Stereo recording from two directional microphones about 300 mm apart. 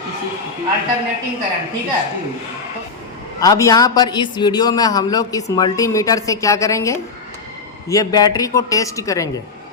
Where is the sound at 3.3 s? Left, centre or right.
Centre.